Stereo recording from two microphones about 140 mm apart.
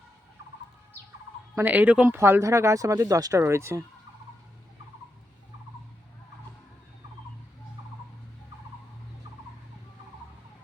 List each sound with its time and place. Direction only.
1.5 s speech: 10° right (ahead or behind)